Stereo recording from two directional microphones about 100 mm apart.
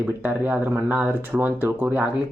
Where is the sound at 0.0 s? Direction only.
20° right (ahead or behind).